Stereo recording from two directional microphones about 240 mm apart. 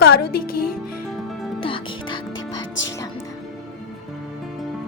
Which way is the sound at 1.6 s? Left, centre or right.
Left.